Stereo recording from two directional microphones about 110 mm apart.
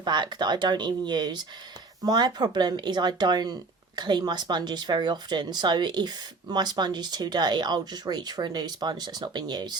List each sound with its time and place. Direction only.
0.0 s speech: 40° right (ahead or behind)